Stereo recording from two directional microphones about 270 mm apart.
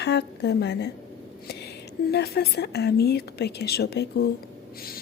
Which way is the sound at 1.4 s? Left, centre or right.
Left.